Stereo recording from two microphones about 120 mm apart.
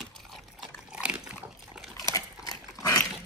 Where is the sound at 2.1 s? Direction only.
30° left (ahead or behind).